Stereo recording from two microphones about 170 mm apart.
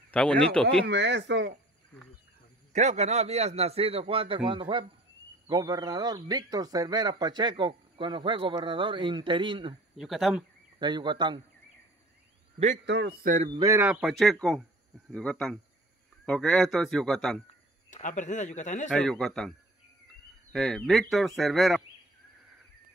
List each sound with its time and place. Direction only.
0.1 s speech: 5° left (ahead or behind)
0.8 s speech: 90° right
2.7 s a man's voice: 45° right (ahead or behind)
9.9 s speech: centre (ahead or behind)
10.8 s speech: 25° right (ahead or behind)
12.8 s speech: 90° right
13.2 s speech: 50° right (ahead or behind)
13.6 s a man's voice: 15° right (ahead or behind)
14.1 s speech: centre (ahead or behind)
17.8 s a man's voice: 45° left (ahead or behind)
18.9 s speech: 5° left (ahead or behind)
20.5 s speech: centre (ahead or behind)